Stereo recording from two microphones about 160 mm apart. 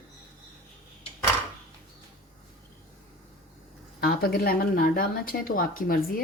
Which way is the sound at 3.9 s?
70° left (ahead or behind).